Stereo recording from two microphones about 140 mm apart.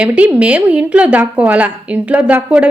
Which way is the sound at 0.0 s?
10° right (ahead or behind).